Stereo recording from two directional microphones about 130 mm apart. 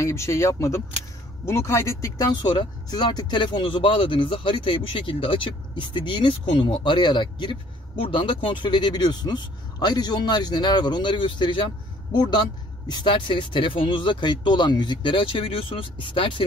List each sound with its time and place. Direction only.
0.0 s speech: 20° left (ahead or behind)
2.5 s speech: 35° left (ahead or behind)
12.8 s speech: 35° left (ahead or behind)